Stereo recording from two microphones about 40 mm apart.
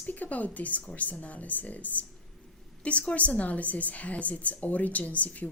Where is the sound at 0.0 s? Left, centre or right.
Left.